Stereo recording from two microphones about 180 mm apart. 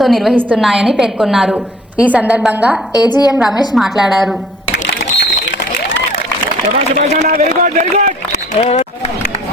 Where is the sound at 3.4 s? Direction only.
Centre (ahead or behind).